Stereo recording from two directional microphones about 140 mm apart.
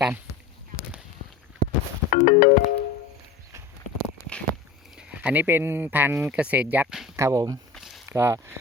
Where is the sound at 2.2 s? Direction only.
60° left (ahead or behind).